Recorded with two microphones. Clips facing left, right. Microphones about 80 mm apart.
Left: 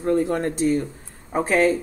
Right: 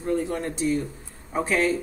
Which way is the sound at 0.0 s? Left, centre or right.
Left.